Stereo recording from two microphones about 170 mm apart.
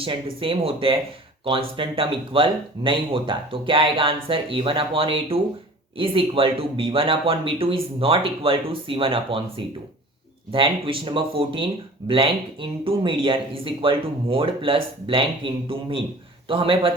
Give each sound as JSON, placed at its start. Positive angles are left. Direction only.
{"t": 0.0, "sound": "speech", "side_deg": -30}